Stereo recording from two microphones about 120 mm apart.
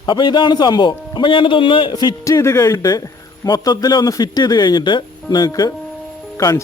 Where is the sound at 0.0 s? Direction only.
40° left (ahead or behind).